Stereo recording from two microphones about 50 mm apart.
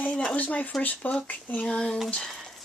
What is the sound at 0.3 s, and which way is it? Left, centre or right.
Speech, left.